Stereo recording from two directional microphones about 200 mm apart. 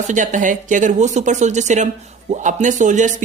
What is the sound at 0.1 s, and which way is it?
Speech, 40° right (ahead or behind).